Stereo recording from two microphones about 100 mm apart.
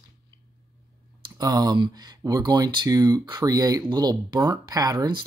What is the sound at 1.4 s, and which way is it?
Speech, 40° right (ahead or behind).